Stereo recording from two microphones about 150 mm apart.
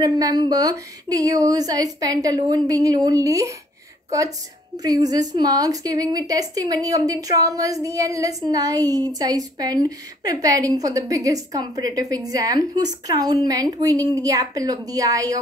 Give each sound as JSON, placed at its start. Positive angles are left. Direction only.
{"t": 0.0, "sound": "a woman's voice", "side_deg": -25}